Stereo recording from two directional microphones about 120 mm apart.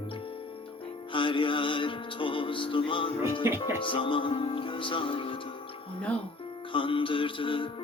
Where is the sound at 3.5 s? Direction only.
25° right (ahead or behind).